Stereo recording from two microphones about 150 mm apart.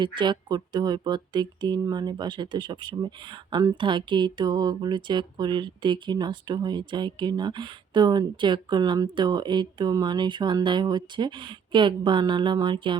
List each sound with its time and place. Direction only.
0.0 s speech: 30° right (ahead or behind)